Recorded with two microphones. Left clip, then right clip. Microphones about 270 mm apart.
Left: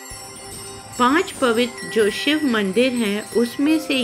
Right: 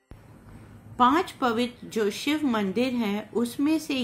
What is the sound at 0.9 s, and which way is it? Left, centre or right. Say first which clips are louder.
Wind chime: left 4 dB; centre.